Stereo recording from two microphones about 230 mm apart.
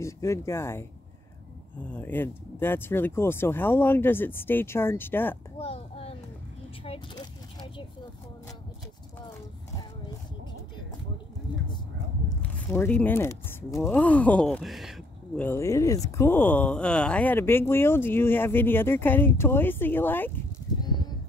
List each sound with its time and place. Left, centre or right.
0.0 s speech: centre
1.9 s speech: centre
5.6 s a sound: left
6.8 s speech: left
12.4 s speech: centre